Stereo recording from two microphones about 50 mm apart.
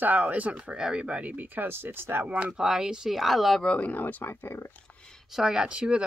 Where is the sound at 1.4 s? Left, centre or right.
Right.